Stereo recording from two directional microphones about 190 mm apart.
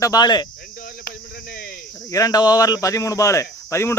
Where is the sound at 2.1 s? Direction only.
20° left (ahead or behind).